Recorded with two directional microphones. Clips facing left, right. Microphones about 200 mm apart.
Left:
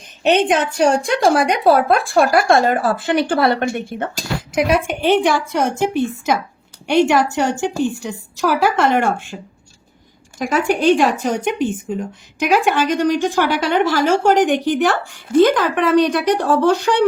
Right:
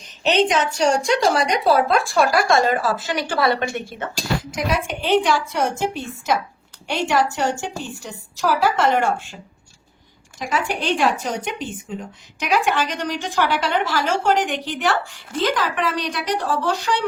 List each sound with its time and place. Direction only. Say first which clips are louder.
0.2 s a woman's voice: left 3 dB; 55° left (ahead or behind)
10.3 s a woman's voice: left 6 dB; 50° left (ahead or behind)